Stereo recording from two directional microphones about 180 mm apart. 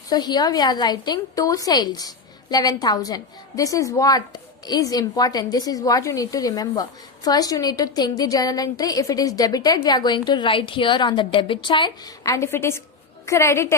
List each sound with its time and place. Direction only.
0.1 s a woman's voice: 20° left (ahead or behind)